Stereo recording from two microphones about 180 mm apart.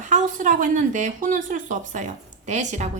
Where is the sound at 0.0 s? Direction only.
45° right (ahead or behind).